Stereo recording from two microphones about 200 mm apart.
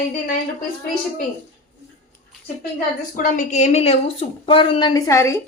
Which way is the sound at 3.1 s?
40° left (ahead or behind).